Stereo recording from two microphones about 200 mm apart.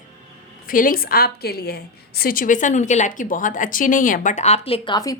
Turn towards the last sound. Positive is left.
turn(degrees=20)  # may be behind; listen again after turning